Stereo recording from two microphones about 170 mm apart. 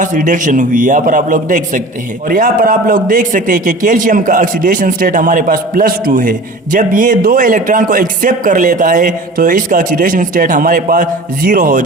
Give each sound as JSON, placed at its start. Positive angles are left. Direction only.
{"t": 0.0, "sound": "a man's voice", "side_deg": -50}